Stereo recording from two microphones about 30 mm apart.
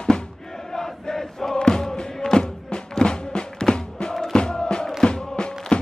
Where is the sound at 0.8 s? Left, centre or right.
Centre.